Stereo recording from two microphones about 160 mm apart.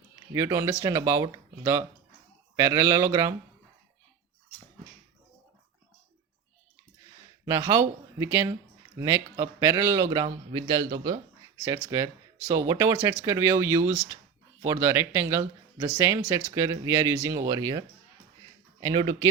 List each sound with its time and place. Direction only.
0.3 s speech: 15° right (ahead or behind)
7.4 s speech: 20° right (ahead or behind)